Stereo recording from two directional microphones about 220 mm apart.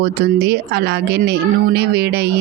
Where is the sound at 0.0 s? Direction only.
50° right (ahead or behind).